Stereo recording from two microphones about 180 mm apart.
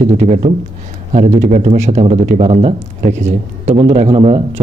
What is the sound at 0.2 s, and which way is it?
A man's voice, 40° right (ahead or behind).